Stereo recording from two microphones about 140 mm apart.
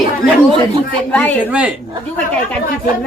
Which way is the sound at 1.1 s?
10° left (ahead or behind).